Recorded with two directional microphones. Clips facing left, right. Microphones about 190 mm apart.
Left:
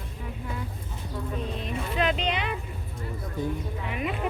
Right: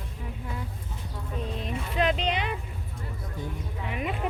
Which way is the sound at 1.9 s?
40° right (ahead or behind).